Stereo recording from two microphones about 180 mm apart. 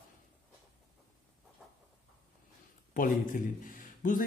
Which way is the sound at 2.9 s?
50° left (ahead or behind).